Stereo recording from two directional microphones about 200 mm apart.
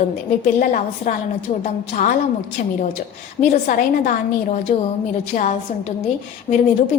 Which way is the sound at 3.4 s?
40° left (ahead or behind).